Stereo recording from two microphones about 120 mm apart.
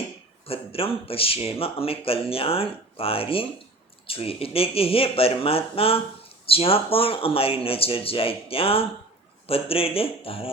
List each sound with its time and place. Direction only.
0.4 s speech: 50° left (ahead or behind)